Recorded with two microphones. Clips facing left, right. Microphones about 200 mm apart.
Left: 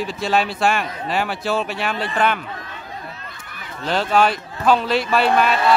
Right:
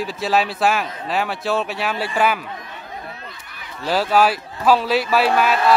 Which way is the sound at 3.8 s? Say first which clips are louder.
Right 1 dB; 5° right (ahead or behind).